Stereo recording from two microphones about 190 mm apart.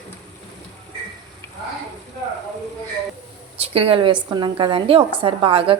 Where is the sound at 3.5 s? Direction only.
30° right (ahead or behind).